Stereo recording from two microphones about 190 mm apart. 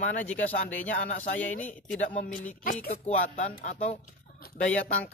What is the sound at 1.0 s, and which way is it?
Speech, 40° left (ahead or behind).